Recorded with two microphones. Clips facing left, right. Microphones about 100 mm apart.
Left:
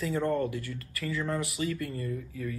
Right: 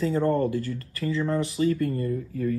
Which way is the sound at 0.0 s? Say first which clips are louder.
Right 5 dB; 35° right (ahead or behind).